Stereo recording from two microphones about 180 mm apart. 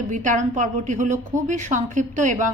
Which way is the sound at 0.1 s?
45° right (ahead or behind).